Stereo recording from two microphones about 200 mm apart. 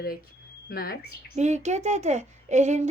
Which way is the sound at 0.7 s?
50° left (ahead or behind).